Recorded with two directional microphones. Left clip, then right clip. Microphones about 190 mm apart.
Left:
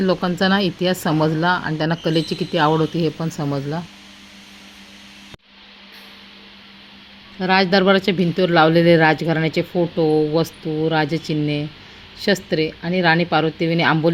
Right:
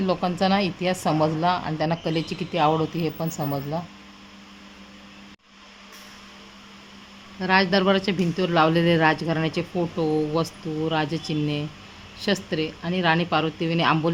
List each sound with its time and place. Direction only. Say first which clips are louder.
0.0 s speech: left 4 dB; 20° left (ahead or behind)
7.3 s speech: left 4 dB; 20° left (ahead or behind)